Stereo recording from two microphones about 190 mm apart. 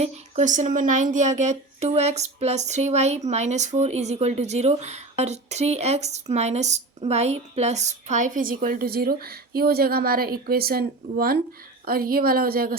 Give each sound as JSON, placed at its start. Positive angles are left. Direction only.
{"t": 0.0, "sound": "speech", "side_deg": -40}